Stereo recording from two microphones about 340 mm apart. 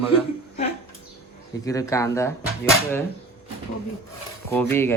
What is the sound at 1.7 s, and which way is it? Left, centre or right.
Speech, centre.